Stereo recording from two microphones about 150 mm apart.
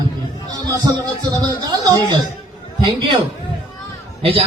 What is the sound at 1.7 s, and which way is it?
A man's voice, 25° right (ahead or behind).